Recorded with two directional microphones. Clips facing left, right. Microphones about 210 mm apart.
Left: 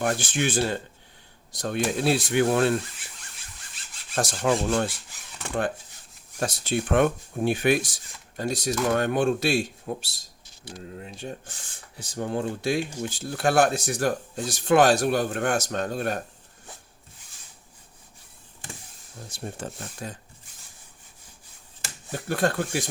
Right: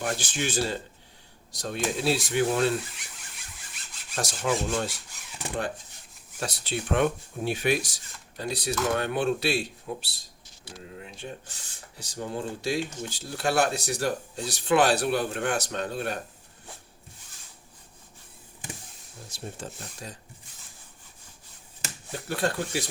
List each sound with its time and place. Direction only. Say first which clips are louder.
0.0 s speech: left 5 dB; 55° left (ahead or behind)
4.1 s speech: left 4 dB; 55° left (ahead or behind)
6.4 s speech: left 5 dB; 45° left (ahead or behind)
19.3 s speech: left 3 dB; 60° left (ahead or behind)
22.3 s speech: left 3 dB; 50° left (ahead or behind)